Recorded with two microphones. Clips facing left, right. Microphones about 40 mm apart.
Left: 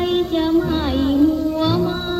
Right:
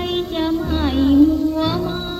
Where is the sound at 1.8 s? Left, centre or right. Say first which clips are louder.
Left 3 dB; centre.